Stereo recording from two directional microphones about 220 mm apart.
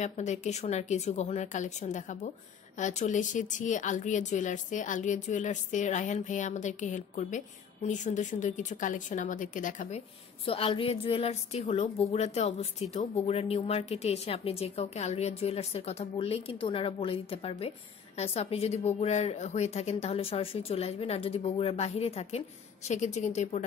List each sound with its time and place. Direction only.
0.0 s a woman's voice: 30° left (ahead or behind)